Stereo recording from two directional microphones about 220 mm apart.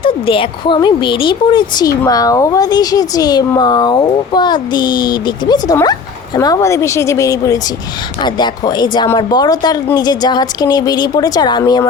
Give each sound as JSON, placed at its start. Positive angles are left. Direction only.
{"t": 0.0, "sound": "speech", "side_deg": 25}